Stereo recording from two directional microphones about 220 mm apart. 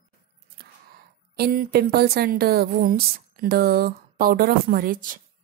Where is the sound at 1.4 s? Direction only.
45° right (ahead or behind).